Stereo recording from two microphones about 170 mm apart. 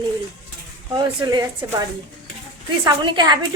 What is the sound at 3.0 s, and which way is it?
Speech, 25° right (ahead or behind).